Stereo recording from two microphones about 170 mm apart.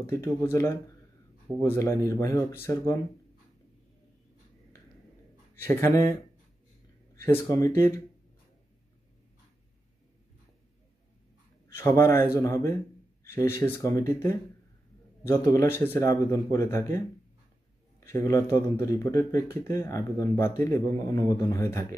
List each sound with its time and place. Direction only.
0.0 s speech: 15° left (ahead or behind)
5.6 s speech: 15° left (ahead or behind)
7.2 s speech: 15° left (ahead or behind)
11.7 s speech: 15° left (ahead or behind)
18.0 s speech: 20° left (ahead or behind)